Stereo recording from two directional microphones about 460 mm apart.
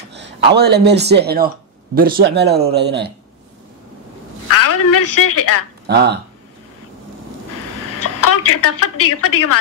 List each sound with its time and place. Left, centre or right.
0.1 s speech: right
4.6 s a woman's voice: left
5.9 s speech: right
8.0 s a woman's voice: left